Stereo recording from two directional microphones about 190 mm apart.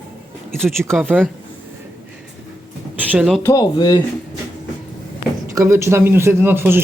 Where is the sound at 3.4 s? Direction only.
20° left (ahead or behind).